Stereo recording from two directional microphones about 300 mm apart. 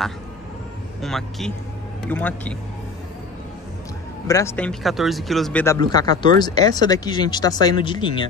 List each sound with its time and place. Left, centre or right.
1.0 s a man's voice: centre
4.3 s speech: centre